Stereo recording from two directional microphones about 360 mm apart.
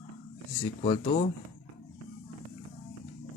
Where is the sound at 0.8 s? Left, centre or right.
Centre.